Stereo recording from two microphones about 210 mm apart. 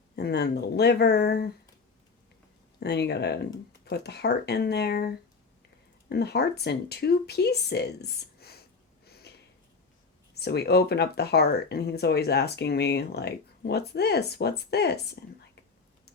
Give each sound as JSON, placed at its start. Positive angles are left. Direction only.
{"t": 0.2, "sound": "speech", "side_deg": 50}
{"t": 2.8, "sound": "speech", "side_deg": 55}
{"t": 9.0, "sound": "a sound", "side_deg": 50}
{"t": 10.4, "sound": "speech", "side_deg": 50}